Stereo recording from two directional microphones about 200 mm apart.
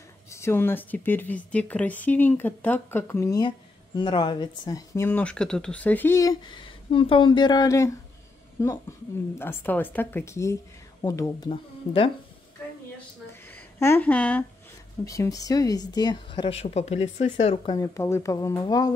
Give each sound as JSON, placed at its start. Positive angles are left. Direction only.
{"t": 0.3, "sound": "speech", "side_deg": 15}
{"t": 6.6, "sound": "speech", "side_deg": 25}
{"t": 13.3, "sound": "a sound", "side_deg": 10}
{"t": 15.0, "sound": "speech", "side_deg": 15}
{"t": 17.7, "sound": "speech", "side_deg": 15}